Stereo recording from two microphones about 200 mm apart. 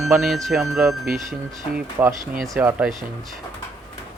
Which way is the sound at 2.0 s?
15° right (ahead or behind).